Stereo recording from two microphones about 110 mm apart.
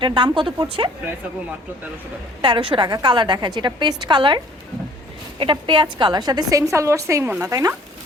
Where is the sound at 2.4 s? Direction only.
45° right (ahead or behind); by 7.7 s 30° right (ahead or behind).